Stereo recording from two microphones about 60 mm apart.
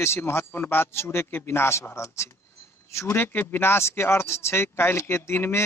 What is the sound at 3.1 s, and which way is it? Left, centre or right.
Speech, left.